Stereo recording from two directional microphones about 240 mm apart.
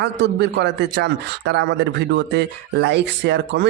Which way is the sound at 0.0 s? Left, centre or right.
Right.